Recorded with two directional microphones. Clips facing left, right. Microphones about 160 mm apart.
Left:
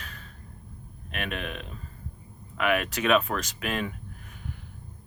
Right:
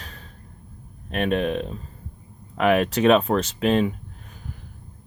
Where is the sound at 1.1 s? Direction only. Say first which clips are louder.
Right 11 dB; 35° right (ahead or behind).